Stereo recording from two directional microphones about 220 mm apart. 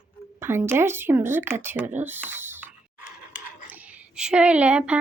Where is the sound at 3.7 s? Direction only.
5° right (ahead or behind).